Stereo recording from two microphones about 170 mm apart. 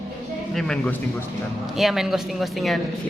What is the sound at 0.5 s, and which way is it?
Speech, centre (ahead or behind).